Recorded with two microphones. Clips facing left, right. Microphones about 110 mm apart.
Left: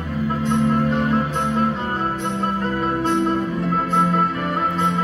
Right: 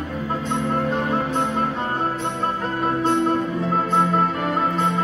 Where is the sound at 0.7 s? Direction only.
25° right (ahead or behind).